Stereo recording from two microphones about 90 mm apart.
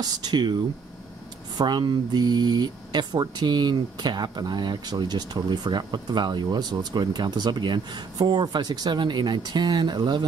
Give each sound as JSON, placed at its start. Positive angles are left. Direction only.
{"t": 0.0, "sound": "speech", "side_deg": -50}
{"t": 1.6, "sound": "speech", "side_deg": -55}